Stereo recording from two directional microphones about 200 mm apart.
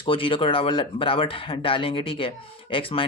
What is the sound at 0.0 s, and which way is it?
Speech, 25° left (ahead or behind).